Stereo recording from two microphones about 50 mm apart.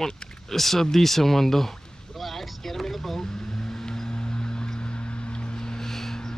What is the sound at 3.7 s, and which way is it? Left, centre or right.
Vehicle, centre.